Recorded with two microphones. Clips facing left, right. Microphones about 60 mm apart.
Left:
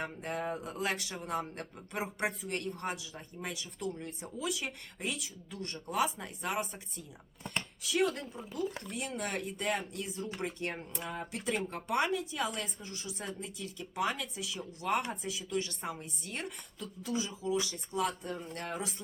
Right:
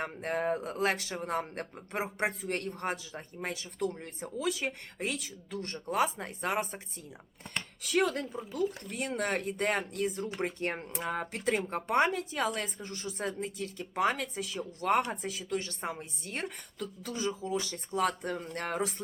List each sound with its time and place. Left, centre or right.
0.0 s speech: right
7.8 s speech: right
11.0 s speech: right
11.3 s speech: right
15.8 s speech: right
17.0 s speech: right